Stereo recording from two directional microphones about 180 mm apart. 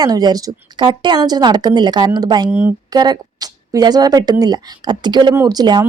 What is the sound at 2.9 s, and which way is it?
A woman's voice, 20° right (ahead or behind).